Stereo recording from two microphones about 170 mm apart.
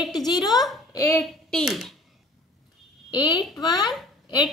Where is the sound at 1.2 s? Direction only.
Centre (ahead or behind).